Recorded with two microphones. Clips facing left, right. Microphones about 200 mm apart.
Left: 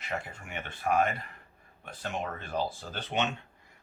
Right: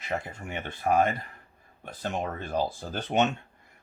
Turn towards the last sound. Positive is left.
turn(degrees=-45)  # may be behind; listen again after turning